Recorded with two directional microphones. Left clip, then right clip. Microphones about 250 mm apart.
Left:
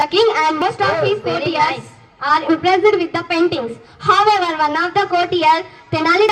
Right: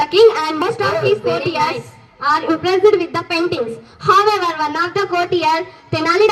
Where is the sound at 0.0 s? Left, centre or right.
Left.